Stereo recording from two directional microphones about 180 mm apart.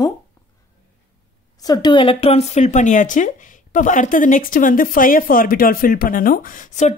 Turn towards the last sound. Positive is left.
turn(degrees=40)  # may be behind; listen again after turning